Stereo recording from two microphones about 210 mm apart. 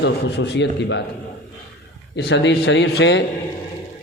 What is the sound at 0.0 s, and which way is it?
A man's voice, 55° left (ahead or behind).